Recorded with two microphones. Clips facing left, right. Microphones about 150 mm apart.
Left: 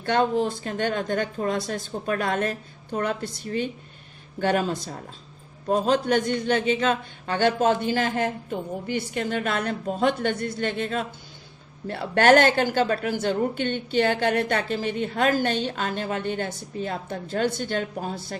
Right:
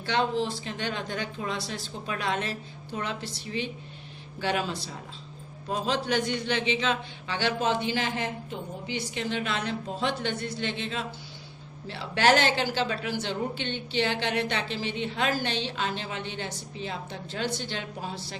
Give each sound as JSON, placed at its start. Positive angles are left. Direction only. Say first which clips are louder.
{"t": 0.0, "sound": "a woman's voice", "louder": "left 5 dB", "side_deg": 50}